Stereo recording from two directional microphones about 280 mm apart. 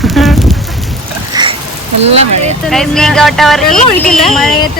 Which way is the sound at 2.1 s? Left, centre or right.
Right.